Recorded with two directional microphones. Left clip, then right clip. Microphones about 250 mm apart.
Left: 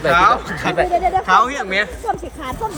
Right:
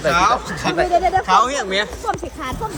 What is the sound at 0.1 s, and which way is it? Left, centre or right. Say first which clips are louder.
Speech: left 3 dB; centre.